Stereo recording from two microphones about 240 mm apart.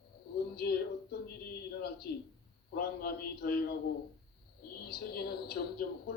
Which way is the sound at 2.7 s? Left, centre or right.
Left.